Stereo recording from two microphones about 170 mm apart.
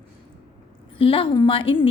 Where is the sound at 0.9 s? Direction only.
30° left (ahead or behind).